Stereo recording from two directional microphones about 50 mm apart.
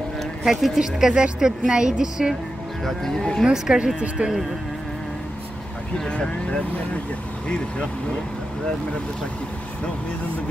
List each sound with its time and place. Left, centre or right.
0.2 s a sound: centre
0.7 s speech: centre
2.8 s speech: centre
3.5 s speech: centre
5.9 s speech: centre